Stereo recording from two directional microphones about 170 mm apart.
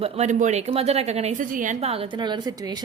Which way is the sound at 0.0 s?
45° right (ahead or behind).